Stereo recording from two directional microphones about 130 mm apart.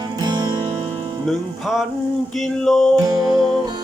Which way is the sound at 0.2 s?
30° right (ahead or behind).